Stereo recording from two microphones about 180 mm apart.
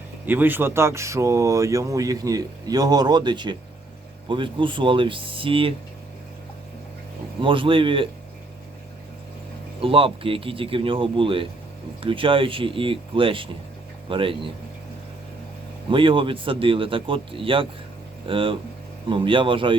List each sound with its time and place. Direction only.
0.3 s speech: 10° right (ahead or behind); by 5.7 s 30° right (ahead or behind)
7.4 s speech: 30° right (ahead or behind)
9.8 s speech: 30° right (ahead or behind)
15.9 s speech: 30° right (ahead or behind)